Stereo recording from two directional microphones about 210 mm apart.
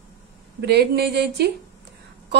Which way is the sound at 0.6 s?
50° right (ahead or behind).